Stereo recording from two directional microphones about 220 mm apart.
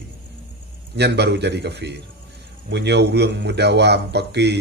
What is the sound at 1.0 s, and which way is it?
A man's voice, 50° right (ahead or behind).